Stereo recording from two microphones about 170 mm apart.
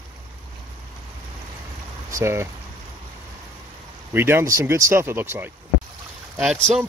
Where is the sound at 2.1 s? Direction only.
15° right (ahead or behind).